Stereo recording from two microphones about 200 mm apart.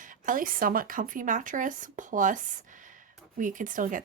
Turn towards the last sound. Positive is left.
turn(degrees=-40)  # may be behind; listen again after turning